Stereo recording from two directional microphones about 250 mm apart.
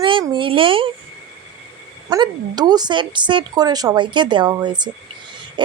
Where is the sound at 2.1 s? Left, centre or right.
Centre.